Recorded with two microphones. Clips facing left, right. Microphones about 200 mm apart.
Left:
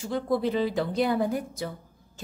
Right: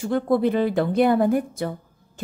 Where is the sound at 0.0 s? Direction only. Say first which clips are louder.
Right 6 dB; 55° right (ahead or behind).